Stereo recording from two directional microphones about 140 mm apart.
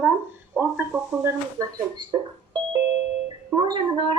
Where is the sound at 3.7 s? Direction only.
30° right (ahead or behind).